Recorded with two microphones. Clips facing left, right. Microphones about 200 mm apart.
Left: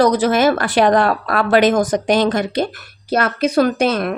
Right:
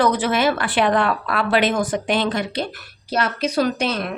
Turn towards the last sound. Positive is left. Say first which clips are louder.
# left 6 dB
turn(degrees=50)  # may be behind; listen again after turning